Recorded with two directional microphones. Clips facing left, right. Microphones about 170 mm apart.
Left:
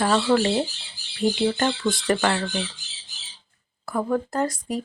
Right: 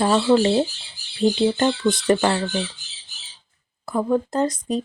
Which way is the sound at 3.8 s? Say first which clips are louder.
Right 3 dB; 20° right (ahead or behind).